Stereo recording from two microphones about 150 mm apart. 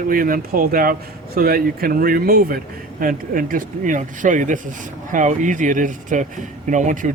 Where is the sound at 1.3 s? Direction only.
90° right.